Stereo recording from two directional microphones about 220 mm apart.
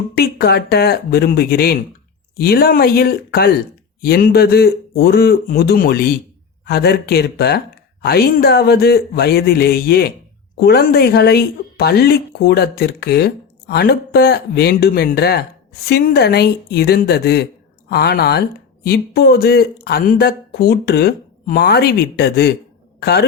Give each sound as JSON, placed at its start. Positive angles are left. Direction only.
{"t": 0.2, "sound": "a woman's voice", "side_deg": 45}